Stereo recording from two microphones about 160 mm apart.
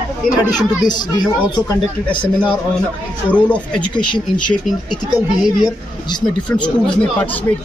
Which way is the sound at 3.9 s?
30° left (ahead or behind).